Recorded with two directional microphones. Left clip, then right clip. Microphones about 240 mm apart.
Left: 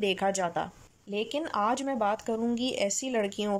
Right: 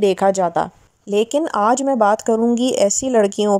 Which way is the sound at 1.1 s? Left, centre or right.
Right.